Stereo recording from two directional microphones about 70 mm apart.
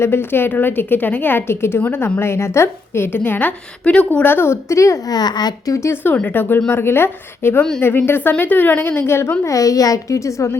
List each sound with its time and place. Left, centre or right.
0.0 s a woman's voice: left
4.7 s a child's voice: left
5.1 s a child's voice: left
5.7 s a child's voice: left
6.2 s a woman's voice: left
9.4 s a child's voice: left